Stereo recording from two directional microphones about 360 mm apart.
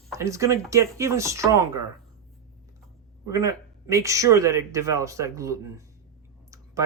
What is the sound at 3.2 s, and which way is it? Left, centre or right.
Speech, centre.